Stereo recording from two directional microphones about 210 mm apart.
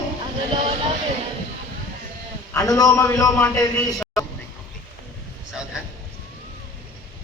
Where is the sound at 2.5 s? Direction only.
15° left (ahead or behind).